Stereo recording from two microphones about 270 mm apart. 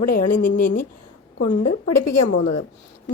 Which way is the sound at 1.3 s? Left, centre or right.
Left.